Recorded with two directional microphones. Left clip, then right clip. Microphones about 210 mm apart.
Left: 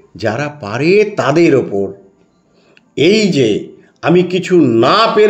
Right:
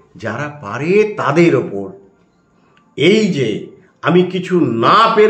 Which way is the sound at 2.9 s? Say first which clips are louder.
Left 2 dB; 40° left (ahead or behind).